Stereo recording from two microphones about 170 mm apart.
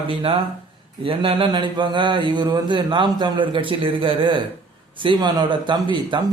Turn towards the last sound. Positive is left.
turn(degrees=-25)  # may be behind; listen again after turning